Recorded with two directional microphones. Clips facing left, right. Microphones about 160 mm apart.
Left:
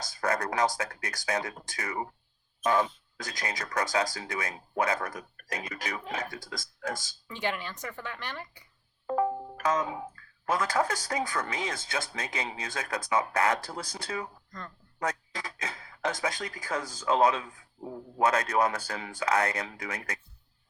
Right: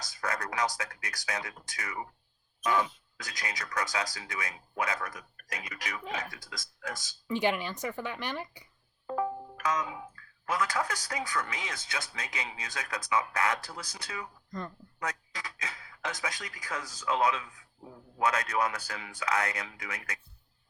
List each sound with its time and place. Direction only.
0.0 s a sound: 35° left (ahead or behind)
0.5 s speech: 30° left (ahead or behind)
0.9 s speech: 40° left (ahead or behind)
6.2 s speech: 25° left (ahead or behind)
7.3 s speech: 10° right (ahead or behind)
9.0 s speech: 45° left (ahead or behind)
15.4 s speech: 35° left (ahead or behind)